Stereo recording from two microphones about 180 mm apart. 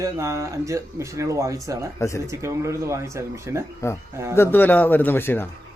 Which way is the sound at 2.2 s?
15° right (ahead or behind).